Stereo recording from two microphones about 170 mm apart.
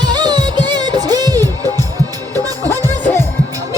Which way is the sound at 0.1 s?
25° right (ahead or behind).